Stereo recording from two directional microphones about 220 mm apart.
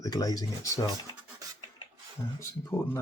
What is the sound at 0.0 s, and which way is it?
Speech, 15° left (ahead or behind).